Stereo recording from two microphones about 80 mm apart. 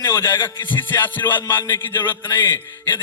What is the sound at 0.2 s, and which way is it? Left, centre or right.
A man's voice, left.